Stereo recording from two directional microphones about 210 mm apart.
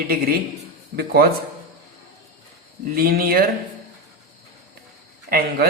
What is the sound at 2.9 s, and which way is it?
Speech, 45° right (ahead or behind).